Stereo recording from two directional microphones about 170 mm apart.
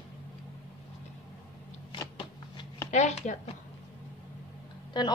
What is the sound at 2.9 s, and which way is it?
Speech, 45° left (ahead or behind).